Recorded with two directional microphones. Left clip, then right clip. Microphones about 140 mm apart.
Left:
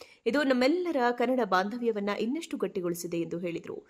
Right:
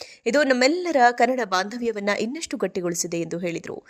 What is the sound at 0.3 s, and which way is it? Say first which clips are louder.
A woman's voice: right 7 dB; 25° right (ahead or behind).